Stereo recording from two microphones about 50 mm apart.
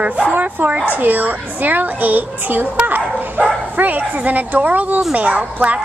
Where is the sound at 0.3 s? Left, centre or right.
Right.